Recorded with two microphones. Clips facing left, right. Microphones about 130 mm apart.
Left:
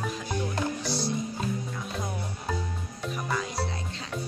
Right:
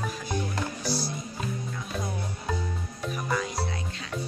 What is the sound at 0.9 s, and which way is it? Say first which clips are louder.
Music: left 1 dB; 25° left (ahead or behind).